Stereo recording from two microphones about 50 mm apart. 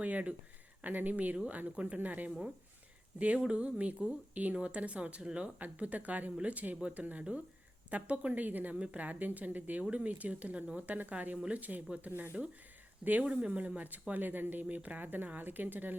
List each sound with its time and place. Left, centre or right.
0.0 s speech: right
7.0 s speech: right
13.2 s speech: right